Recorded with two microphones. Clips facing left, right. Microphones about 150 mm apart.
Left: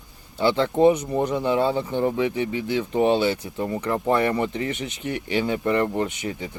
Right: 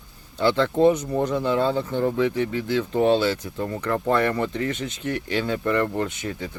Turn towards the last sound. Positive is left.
turn(degrees=15)  # may be behind; listen again after turning